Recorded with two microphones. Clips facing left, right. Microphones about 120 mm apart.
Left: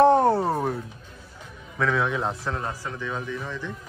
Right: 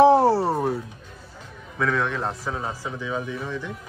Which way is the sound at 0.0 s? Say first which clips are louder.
Right 2 dB; 5° right (ahead or behind).